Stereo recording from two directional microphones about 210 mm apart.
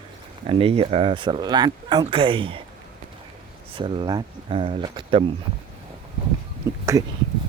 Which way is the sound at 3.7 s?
25° right (ahead or behind).